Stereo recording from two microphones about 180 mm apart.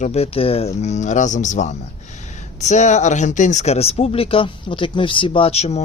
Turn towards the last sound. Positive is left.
turn(degrees=35)  # may be behind; listen again after turning